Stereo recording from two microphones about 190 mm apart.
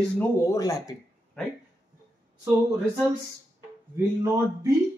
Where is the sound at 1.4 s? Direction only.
5° left (ahead or behind).